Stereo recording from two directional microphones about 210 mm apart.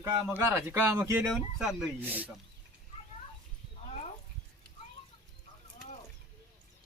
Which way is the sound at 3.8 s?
30° left (ahead or behind).